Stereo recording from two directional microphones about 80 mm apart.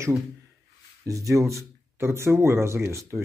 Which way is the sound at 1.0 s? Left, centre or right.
Right.